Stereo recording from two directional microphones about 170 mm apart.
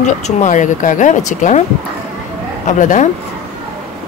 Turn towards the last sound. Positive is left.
turn(degrees=50)  # may be behind; listen again after turning